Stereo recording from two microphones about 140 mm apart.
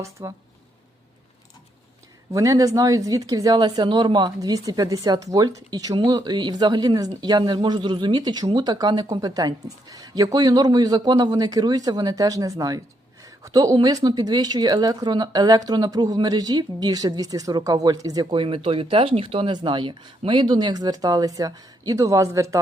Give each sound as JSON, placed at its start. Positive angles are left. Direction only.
{"t": 0.0, "sound": "a woman's voice", "side_deg": -20}
{"t": 2.3, "sound": "a woman's voice", "side_deg": -25}